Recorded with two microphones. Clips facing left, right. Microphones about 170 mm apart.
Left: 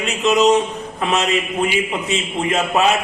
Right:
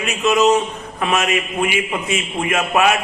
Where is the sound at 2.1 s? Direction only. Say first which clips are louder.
Even; 30° left (ahead or behind).